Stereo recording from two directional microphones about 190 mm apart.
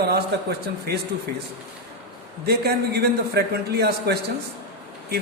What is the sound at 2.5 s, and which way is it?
A man's voice, 55° right (ahead or behind).